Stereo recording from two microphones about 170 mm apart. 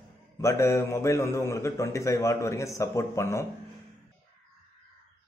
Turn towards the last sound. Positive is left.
turn(degrees=15)  # may be behind; listen again after turning